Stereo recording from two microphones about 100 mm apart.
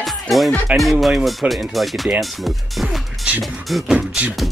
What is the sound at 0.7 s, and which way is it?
Speech, centre (ahead or behind).